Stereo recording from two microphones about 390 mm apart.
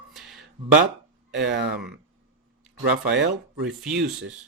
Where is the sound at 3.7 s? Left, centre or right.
Centre.